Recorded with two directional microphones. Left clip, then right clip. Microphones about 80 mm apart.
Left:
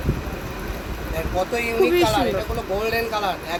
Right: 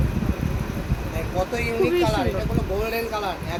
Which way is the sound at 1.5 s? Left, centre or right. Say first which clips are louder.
Left 3 dB; centre.